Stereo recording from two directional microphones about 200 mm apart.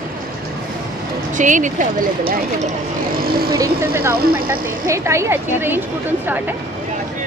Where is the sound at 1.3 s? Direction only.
40° right (ahead or behind).